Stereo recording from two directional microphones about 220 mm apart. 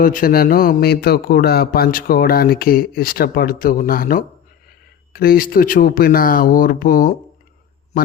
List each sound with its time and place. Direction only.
0.0 s speech: 40° left (ahead or behind)